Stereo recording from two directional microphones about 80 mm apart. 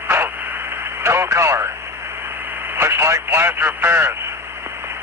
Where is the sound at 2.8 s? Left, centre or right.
Right.